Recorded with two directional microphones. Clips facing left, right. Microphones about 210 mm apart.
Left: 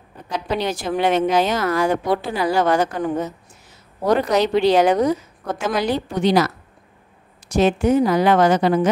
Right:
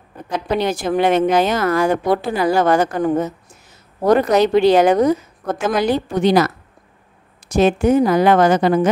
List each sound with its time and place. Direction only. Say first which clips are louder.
0.6 s a woman's voice: right 5 dB; 50° right (ahead or behind)
7.5 s a woman's voice: right 2 dB; 50° right (ahead or behind)